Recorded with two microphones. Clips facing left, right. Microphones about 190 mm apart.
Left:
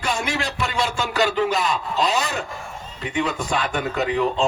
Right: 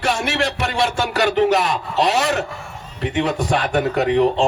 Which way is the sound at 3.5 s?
50° right (ahead or behind).